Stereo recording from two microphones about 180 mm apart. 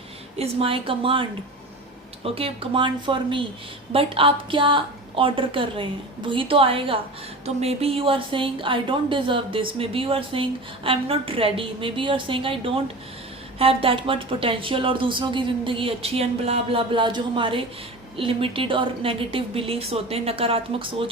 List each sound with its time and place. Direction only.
0.3 s speech: 30° right (ahead or behind)